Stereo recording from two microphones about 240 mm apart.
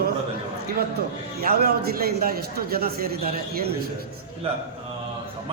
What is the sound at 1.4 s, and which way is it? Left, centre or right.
A man's voice, right.